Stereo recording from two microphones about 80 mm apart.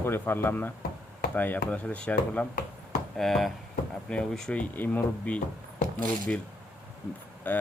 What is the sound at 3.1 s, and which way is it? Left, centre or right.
Speech, centre.